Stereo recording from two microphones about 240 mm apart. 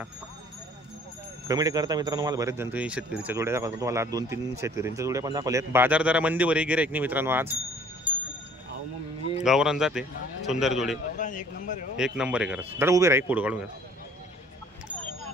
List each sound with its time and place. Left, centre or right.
1.5 s speech: centre
8.1 s a sound: centre
9.4 s a man's voice: centre
11.1 s speech: left
12.0 s speech: centre